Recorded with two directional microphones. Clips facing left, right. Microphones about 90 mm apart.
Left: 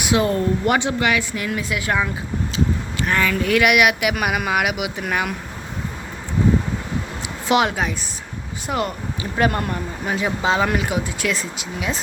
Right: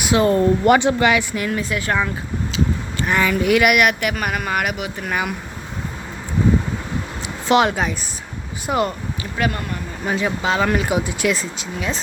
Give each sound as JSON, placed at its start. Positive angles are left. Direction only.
{"t": 0.0, "sound": "speech", "side_deg": 5}
{"t": 0.6, "sound": "speech", "side_deg": -50}
{"t": 1.3, "sound": "speech", "side_deg": 0}
{"t": 3.1, "sound": "speech", "side_deg": -10}
{"t": 7.2, "sound": "a sound", "side_deg": 5}
{"t": 8.6, "sound": "speech", "side_deg": 0}
{"t": 9.4, "sound": "speech", "side_deg": 45}
{"t": 10.2, "sound": "speech", "side_deg": 15}
{"t": 10.7, "sound": "speech", "side_deg": 5}
{"t": 10.9, "sound": "speech", "side_deg": -10}
{"t": 11.5, "sound": "speech", "side_deg": 5}